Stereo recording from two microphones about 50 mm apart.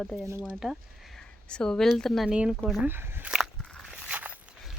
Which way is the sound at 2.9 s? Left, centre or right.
Right.